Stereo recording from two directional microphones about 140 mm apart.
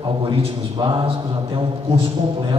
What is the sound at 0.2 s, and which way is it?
A man's voice, 35° right (ahead or behind).